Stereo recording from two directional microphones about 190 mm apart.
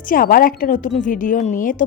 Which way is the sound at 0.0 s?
45° left (ahead or behind).